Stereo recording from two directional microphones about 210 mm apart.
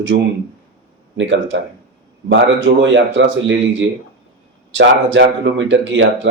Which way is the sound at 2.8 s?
60° right (ahead or behind).